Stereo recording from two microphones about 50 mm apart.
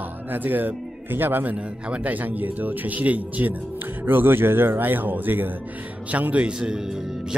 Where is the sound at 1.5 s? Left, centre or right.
Right.